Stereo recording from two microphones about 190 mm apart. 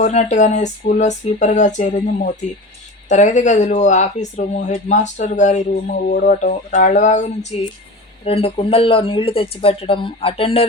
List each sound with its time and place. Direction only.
0.0 s speech: 40° left (ahead or behind)